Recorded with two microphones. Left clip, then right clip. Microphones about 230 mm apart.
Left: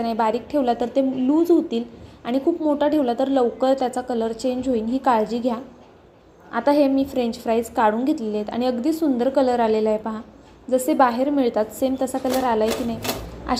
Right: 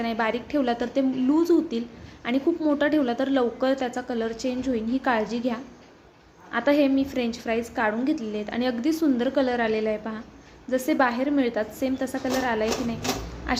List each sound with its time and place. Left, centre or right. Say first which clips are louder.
0.0 s a woman's voice: left 5 dB; centre